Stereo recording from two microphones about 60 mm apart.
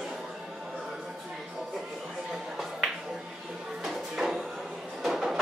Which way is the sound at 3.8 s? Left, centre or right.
Centre.